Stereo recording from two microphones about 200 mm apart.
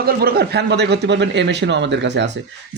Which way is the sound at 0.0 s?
50° right (ahead or behind).